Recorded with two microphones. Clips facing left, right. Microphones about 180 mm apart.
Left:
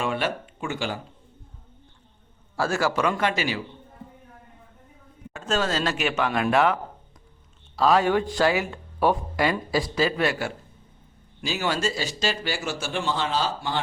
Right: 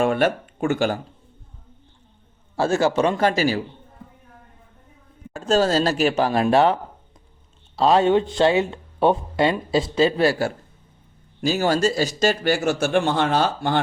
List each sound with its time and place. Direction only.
0.0 s speech: 50° right (ahead or behind)
2.6 s speech: 25° right (ahead or behind)
5.3 s speech: 35° right (ahead or behind)
7.8 s speech: 25° right (ahead or behind); by 13.8 s 55° right (ahead or behind)